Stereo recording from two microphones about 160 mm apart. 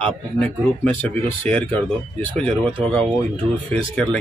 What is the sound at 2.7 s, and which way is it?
Speech, 30° right (ahead or behind).